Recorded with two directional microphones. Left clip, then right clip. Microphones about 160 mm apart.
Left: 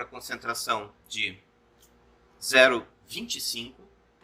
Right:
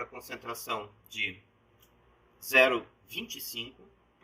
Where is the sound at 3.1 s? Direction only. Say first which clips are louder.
Left 5 dB; 45° left (ahead or behind).